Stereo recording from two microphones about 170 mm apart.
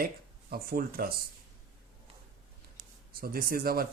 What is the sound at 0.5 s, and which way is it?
Speech, 60° right (ahead or behind).